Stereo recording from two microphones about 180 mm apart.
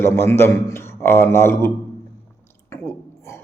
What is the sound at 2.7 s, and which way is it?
Whispering, 15° left (ahead or behind).